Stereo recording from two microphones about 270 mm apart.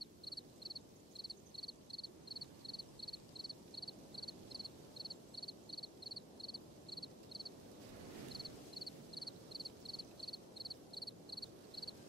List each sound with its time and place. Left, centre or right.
0.0 s frog: centre
0.7 s cricket: centre